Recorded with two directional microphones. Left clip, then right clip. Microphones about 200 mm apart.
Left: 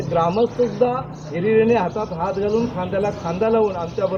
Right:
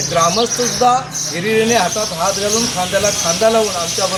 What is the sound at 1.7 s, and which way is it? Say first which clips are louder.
A man's voice: right 4 dB; 5° right (ahead or behind).